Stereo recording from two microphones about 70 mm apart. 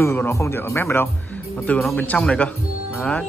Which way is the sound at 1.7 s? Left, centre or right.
Left.